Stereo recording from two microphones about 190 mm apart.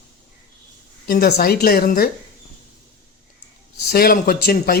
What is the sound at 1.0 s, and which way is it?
Speech, 50° left (ahead or behind).